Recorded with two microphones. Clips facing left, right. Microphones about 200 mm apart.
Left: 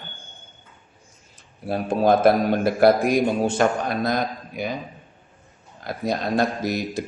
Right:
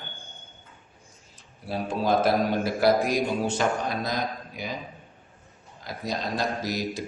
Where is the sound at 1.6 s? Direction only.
55° left (ahead or behind).